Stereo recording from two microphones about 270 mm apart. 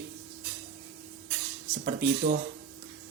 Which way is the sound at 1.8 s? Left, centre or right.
Right.